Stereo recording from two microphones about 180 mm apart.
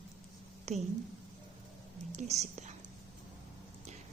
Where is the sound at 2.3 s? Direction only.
40° right (ahead or behind).